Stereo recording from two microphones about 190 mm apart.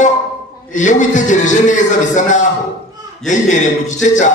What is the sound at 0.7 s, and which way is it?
A man's voice, 40° left (ahead or behind).